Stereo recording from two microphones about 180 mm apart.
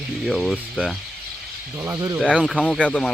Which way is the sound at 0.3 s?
Centre (ahead or behind).